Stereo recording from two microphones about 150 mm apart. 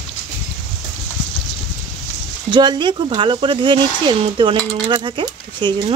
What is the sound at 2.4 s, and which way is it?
Speech, 30° right (ahead or behind).